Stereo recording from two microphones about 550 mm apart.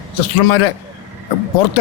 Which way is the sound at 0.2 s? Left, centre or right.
Left.